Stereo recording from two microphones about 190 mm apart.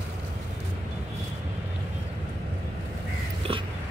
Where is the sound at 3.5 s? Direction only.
30° right (ahead or behind).